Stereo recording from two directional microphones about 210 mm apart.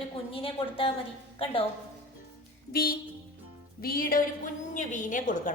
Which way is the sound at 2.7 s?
45° left (ahead or behind).